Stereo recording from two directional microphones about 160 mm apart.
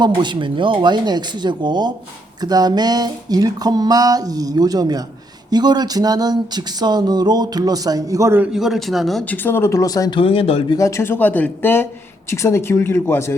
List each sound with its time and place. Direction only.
0.0 s speech: 30° right (ahead or behind)
8.5 s speech: centre (ahead or behind); by 10.8 s 35° left (ahead or behind)
10.8 s speech: 20° left (ahead or behind)